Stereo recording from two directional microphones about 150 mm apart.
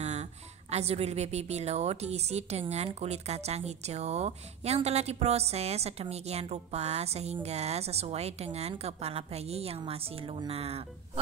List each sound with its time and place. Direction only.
0.0 s speech: 50° right (ahead or behind)